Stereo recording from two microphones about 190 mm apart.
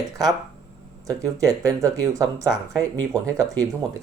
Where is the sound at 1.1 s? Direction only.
15° right (ahead or behind).